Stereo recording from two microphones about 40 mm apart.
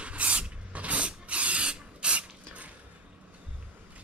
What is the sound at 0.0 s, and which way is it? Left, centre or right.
Spray, right.